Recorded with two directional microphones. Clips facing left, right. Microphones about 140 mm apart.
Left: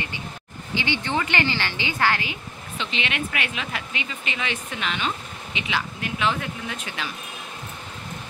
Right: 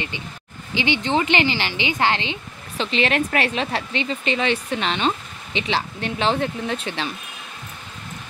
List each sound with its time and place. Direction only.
0.7 s a woman's voice: 20° right (ahead or behind)
2.8 s speech: 35° right (ahead or behind)